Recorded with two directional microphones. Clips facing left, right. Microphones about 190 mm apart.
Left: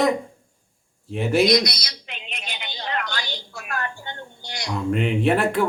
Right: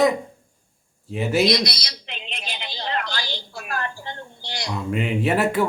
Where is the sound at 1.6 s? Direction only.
30° right (ahead or behind).